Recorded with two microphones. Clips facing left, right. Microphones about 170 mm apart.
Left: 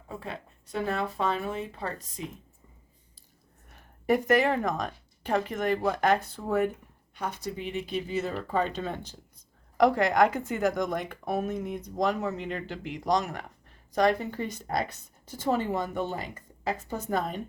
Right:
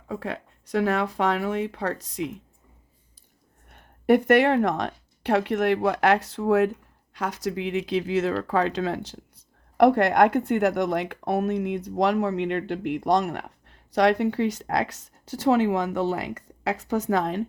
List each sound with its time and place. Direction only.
0.1 s speech: 85° right
3.7 s speech: 60° right (ahead or behind); by 9.1 s 85° right
9.7 s speech: 60° right (ahead or behind); by 17.4 s 90° right